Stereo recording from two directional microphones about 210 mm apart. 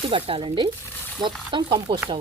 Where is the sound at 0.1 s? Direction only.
25° right (ahead or behind).